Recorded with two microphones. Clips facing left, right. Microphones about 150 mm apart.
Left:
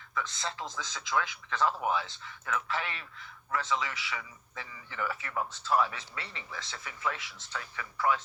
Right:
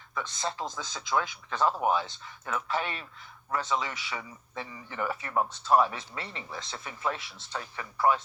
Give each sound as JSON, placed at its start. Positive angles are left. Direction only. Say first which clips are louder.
{"t": 0.1, "sound": "a man's voice", "louder": "right 2 dB", "side_deg": -30}